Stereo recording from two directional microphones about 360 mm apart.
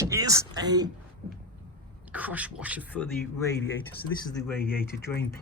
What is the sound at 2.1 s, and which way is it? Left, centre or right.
Speech, centre.